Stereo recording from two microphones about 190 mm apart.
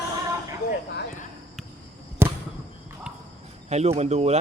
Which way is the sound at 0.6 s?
55° left (ahead or behind).